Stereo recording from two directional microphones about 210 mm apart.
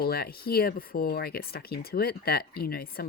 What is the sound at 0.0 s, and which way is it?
Speech, 45° left (ahead or behind).